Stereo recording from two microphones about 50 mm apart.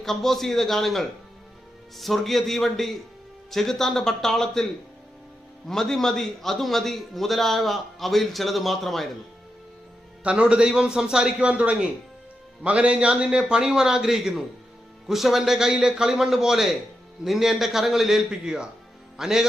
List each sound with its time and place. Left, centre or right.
0.0 s a man's voice: centre
5.6 s a man's voice: centre
10.2 s a man's voice: right